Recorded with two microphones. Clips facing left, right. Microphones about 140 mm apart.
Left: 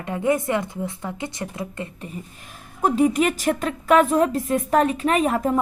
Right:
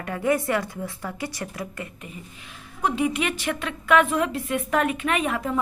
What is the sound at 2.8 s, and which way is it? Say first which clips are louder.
A woman's voice: left 5 dB; 40° left (ahead or behind).